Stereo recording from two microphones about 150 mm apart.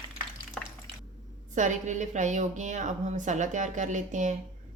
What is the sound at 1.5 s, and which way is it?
A woman's voice, 55° right (ahead or behind).